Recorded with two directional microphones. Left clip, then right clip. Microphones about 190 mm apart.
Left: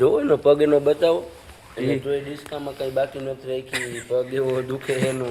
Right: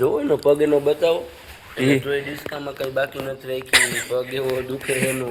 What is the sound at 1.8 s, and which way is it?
Speech, 35° right (ahead or behind).